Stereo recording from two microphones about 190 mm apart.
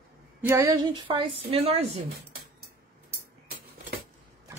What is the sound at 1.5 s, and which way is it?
Speech, 30° right (ahead or behind).